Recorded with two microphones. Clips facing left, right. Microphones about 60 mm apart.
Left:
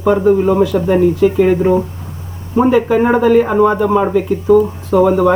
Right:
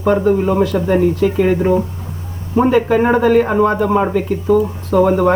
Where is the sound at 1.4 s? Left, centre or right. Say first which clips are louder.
Left 2 dB; centre.